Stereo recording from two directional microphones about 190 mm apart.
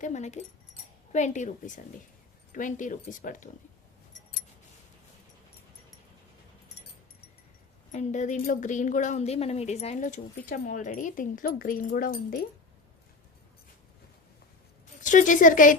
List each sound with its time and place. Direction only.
0.0 s a woman's voice: 35° left (ahead or behind)
7.9 s a woman's voice: 40° left (ahead or behind)
15.0 s a woman's voice: 40° left (ahead or behind)